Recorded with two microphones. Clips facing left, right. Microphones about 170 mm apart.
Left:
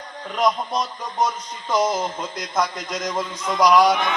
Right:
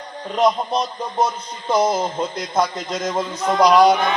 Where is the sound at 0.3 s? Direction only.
25° right (ahead or behind).